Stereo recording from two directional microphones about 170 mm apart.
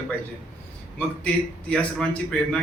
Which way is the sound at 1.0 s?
5° left (ahead or behind).